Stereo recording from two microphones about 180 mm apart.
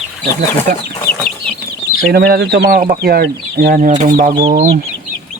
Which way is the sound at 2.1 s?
65° right (ahead or behind).